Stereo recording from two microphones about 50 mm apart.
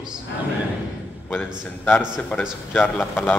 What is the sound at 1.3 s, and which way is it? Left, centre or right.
A man's voice, left.